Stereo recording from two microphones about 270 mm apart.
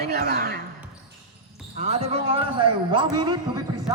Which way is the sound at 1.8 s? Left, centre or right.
Right.